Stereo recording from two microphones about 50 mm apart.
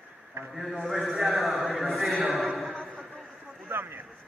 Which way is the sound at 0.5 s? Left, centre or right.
Centre.